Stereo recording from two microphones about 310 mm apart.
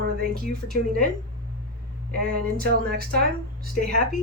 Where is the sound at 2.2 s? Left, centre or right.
Right.